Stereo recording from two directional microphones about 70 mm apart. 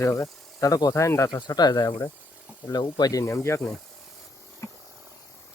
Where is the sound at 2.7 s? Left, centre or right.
Left.